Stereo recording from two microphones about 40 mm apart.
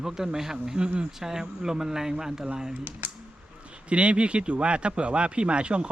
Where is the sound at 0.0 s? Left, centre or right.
Centre.